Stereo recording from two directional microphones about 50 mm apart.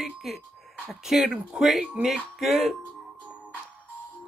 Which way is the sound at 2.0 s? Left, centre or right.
Right.